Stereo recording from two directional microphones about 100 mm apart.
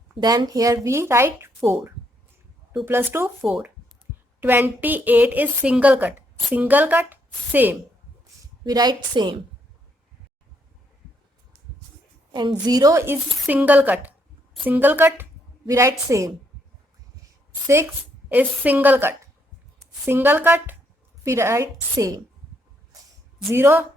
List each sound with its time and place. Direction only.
0.2 s a woman's voice: 40° right (ahead or behind)
0.9 s speech: 25° right (ahead or behind)
4.4 s speech: 20° right (ahead or behind)
8.6 s a woman's voice: 40° right (ahead or behind)
12.3 s a woman's voice: 45° right (ahead or behind); by 13.1 s 30° right (ahead or behind)
13.5 s speech: 15° right (ahead or behind)
15.6 s a woman's voice: 35° right (ahead or behind)
17.7 s a woman's voice: 25° right (ahead or behind)
23.5 s speech: 25° right (ahead or behind)